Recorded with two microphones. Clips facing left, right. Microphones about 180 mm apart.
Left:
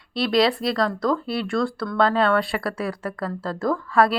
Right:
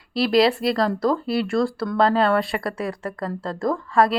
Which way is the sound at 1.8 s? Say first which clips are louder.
Right 1 dB; 30° right (ahead or behind).